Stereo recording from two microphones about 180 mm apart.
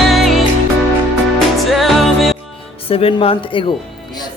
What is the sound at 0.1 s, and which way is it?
Music, centre (ahead or behind).